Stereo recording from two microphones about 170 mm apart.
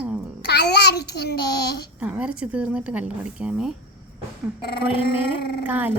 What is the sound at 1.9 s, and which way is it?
Speech, 5° right (ahead or behind).